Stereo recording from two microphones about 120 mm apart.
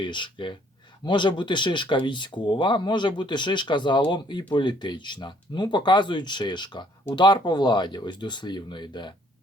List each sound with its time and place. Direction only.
0.0 s speech: 40° left (ahead or behind)